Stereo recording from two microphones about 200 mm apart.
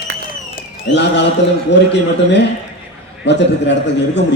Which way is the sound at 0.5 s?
60° left (ahead or behind).